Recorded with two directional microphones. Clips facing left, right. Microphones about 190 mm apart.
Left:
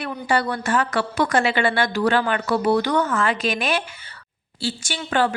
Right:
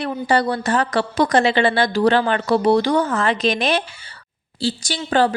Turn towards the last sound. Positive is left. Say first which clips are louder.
# right 4 dB
turn(degrees=-35)  # may be behind; listen again after turning